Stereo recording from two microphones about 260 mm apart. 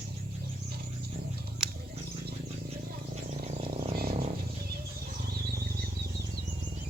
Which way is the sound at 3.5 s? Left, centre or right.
Right.